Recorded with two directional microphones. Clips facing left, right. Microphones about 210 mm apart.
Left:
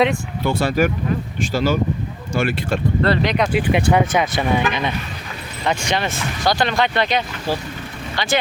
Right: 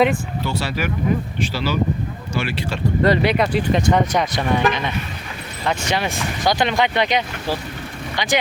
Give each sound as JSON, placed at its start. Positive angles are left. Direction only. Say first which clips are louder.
{"t": 0.4, "sound": "speech", "louder": "left 8 dB", "side_deg": 50}
{"t": 3.0, "sound": "speech", "louder": "right 3 dB", "side_deg": -10}
{"t": 3.7, "sound": "speech", "louder": "left 1 dB", "side_deg": 10}
{"t": 5.8, "sound": "speech", "louder": "even", "side_deg": -10}